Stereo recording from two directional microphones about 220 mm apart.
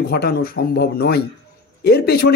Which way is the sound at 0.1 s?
45° left (ahead or behind).